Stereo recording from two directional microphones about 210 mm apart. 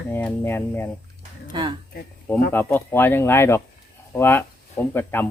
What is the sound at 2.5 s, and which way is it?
Speech, 10° left (ahead or behind).